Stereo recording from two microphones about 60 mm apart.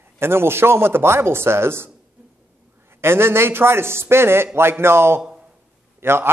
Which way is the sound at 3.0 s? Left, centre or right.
Right.